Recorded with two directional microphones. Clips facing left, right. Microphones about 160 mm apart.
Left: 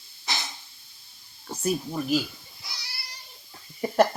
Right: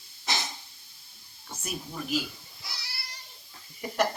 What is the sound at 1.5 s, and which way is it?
Speech, 35° left (ahead or behind).